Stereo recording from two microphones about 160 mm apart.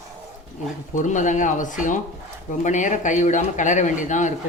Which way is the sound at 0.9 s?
50° left (ahead or behind).